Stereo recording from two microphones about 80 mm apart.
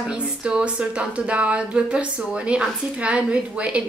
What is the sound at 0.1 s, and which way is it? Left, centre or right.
Speech, centre.